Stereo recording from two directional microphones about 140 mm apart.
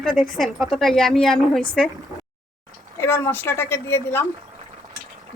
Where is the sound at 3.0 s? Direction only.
15° left (ahead or behind).